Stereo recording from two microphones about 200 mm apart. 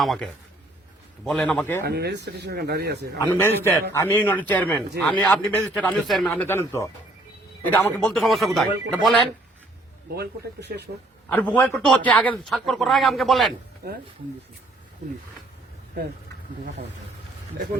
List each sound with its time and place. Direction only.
0.0 s a man's voice: centre (ahead or behind)
1.8 s speech: 55° right (ahead or behind)
3.2 s a man's voice: 10° left (ahead or behind)
6.3 s a man's voice: 10° left (ahead or behind)
10.2 s speech: 55° right (ahead or behind)
11.3 s a man's voice: 10° left (ahead or behind)